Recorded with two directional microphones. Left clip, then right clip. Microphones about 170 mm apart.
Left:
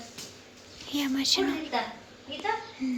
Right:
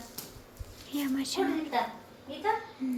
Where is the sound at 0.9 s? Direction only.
5° left (ahead or behind).